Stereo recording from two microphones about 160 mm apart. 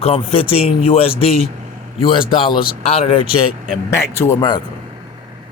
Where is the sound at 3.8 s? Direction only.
20° left (ahead or behind).